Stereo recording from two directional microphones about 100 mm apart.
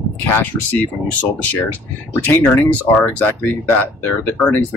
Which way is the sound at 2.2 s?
20° left (ahead or behind).